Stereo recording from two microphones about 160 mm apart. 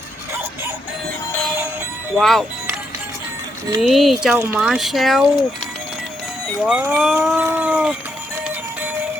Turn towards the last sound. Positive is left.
turn(degrees=-10)  # may be behind; listen again after turning